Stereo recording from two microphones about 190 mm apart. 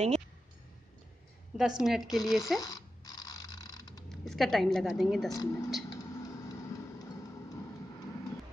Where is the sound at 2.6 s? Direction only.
20° left (ahead or behind).